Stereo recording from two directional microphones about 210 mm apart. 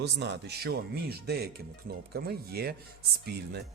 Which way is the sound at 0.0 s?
55° right (ahead or behind).